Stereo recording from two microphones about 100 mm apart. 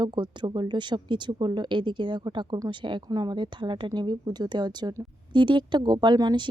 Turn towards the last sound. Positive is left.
turn(degrees=-45)  # may be behind; listen again after turning